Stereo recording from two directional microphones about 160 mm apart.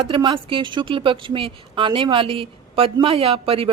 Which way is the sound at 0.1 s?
30° right (ahead or behind).